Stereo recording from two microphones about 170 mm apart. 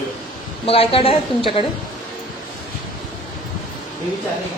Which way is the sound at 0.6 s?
35° left (ahead or behind).